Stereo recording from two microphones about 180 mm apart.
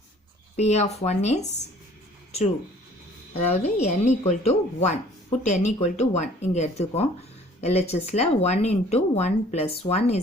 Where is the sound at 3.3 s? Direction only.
40° left (ahead or behind).